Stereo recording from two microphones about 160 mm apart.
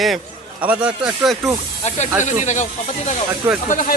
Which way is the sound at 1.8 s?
45° left (ahead or behind).